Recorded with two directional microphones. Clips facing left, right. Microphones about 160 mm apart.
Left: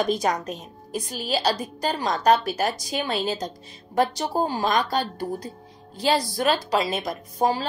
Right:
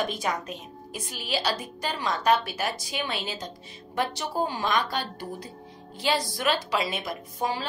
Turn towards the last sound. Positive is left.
turn(degrees=40)  # may be behind; listen again after turning